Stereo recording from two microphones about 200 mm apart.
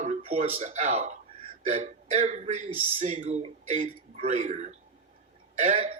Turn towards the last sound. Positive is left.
turn(degrees=-30)  # may be behind; listen again after turning